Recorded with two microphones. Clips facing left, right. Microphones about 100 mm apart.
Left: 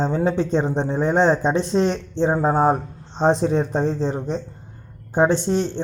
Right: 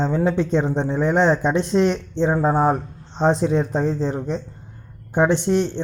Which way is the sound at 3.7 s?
20° left (ahead or behind).